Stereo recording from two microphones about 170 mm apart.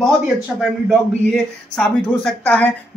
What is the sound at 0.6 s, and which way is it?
Speech, centre (ahead or behind).